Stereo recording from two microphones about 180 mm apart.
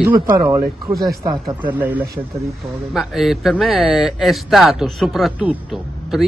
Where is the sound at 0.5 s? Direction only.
15° right (ahead or behind).